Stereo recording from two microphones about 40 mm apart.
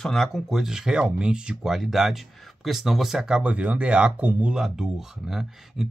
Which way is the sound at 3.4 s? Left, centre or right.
Right.